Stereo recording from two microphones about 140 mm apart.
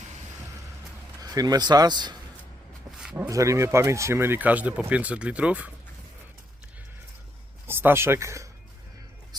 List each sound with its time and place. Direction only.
1.2 s speech: 25° right (ahead or behind)
3.0 s a sound: 10° right (ahead or behind)
3.2 s speech: 20° right (ahead or behind)
7.7 s speech: 15° right (ahead or behind)